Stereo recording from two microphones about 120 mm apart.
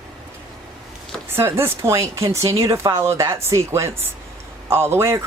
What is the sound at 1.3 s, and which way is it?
Speech, 20° right (ahead or behind).